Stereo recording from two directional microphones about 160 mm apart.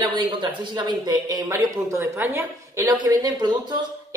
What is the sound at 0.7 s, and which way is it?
A woman's voice, 30° right (ahead or behind).